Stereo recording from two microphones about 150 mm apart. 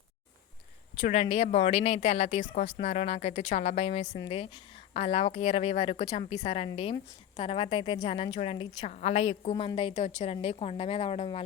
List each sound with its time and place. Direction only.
1.0 s a woman's voice: 45° left (ahead or behind)
4.1 s a woman's voice: 30° left (ahead or behind)